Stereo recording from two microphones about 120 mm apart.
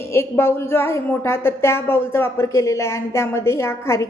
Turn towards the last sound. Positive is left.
turn(degrees=20)  # may be behind; listen again after turning